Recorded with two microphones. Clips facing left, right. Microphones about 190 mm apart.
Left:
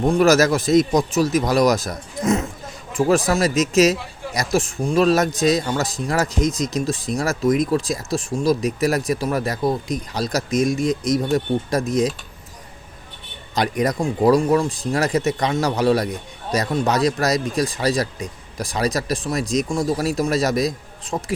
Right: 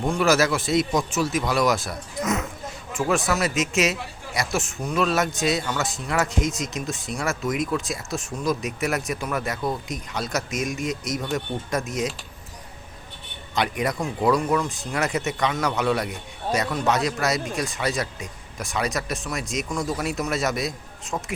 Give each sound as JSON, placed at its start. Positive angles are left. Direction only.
{"t": 0.1, "sound": "speech", "side_deg": 40}
{"t": 13.6, "sound": "speech", "side_deg": 40}